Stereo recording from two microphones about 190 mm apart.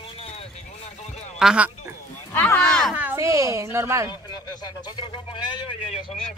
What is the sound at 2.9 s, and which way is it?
A woman's voice, 10° right (ahead or behind).